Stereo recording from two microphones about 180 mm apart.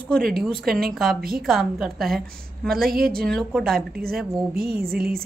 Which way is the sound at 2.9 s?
55° right (ahead or behind).